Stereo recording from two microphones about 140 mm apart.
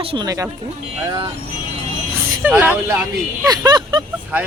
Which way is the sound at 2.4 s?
15° right (ahead or behind).